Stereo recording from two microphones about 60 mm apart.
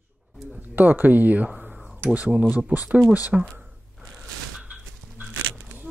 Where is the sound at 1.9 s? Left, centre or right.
Right.